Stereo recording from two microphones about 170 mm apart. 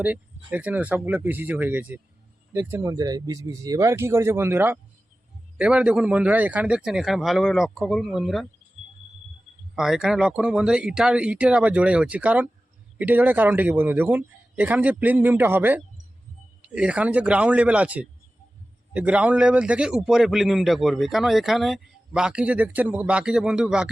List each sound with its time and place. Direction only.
0.0 s a man's voice: 10° right (ahead or behind)
9.7 s a man's voice: 5° right (ahead or behind)